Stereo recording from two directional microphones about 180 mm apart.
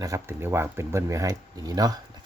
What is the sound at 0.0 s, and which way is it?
Speech, 15° right (ahead or behind).